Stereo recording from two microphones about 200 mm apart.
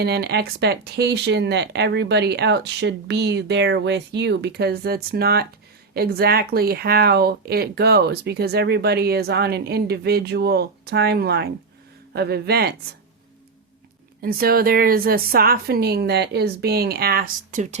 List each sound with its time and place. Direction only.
0.0 s speech: 55° right (ahead or behind)
14.2 s speech: 50° right (ahead or behind)